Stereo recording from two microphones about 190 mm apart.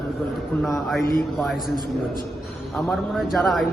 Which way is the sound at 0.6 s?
Centre (ahead or behind).